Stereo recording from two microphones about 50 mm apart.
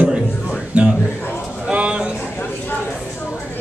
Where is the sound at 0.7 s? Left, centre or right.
Right.